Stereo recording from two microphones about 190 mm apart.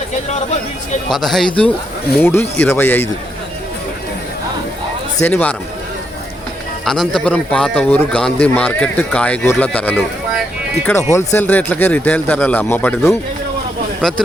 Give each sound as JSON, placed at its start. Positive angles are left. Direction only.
{"t": 0.3, "sound": "speech", "side_deg": 35}
{"t": 1.1, "sound": "a man's voice", "side_deg": 0}
{"t": 5.2, "sound": "a man's voice", "side_deg": 10}
{"t": 6.8, "sound": "a man's voice", "side_deg": 0}